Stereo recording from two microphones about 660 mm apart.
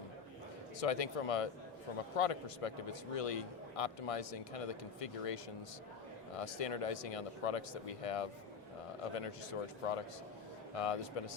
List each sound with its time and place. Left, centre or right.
0.8 s a man's voice: left